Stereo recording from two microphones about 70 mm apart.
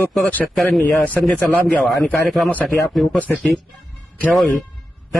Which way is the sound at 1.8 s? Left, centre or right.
Centre.